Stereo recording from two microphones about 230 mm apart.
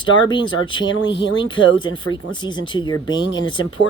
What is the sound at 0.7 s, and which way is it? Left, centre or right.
Speech, centre.